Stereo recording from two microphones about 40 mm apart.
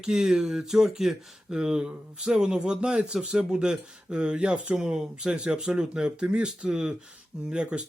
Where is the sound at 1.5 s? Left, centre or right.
Centre.